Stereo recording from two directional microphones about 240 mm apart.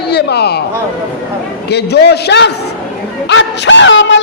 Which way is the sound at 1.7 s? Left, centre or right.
Left.